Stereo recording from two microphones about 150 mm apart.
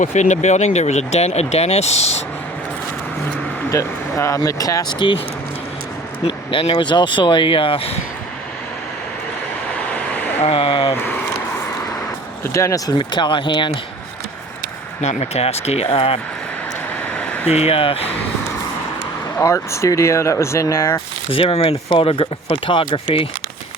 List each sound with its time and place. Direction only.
0.0 s speech: 55° left (ahead or behind)
3.7 s speech: 20° left (ahead or behind)
6.2 s speech: 35° left (ahead or behind)
10.4 s speech: 40° left (ahead or behind)
12.5 s speech: 20° left (ahead or behind)
15.0 s speech: 45° left (ahead or behind)
17.4 s speech: 45° left (ahead or behind)
19.4 s speech: 20° left (ahead or behind)
21.2 s speech: 40° left (ahead or behind)